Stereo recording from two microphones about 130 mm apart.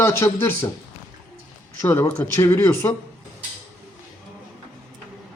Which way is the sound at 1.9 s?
20° left (ahead or behind).